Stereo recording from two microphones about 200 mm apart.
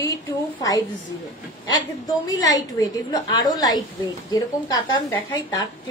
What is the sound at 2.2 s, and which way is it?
A woman's voice, 20° left (ahead or behind).